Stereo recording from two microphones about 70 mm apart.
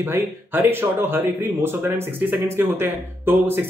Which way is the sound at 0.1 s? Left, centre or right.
Right.